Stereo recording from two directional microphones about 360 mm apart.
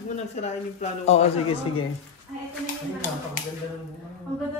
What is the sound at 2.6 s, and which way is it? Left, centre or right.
Speech, left.